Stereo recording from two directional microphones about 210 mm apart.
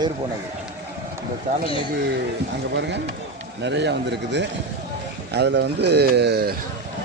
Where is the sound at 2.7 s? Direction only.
55° right (ahead or behind).